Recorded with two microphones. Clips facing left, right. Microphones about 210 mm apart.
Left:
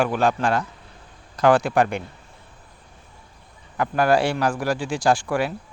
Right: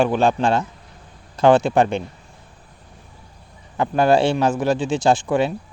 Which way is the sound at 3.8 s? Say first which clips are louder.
Right 3 dB; 25° right (ahead or behind).